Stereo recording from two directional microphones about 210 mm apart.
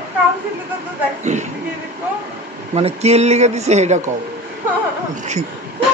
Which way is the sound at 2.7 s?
30° right (ahead or behind).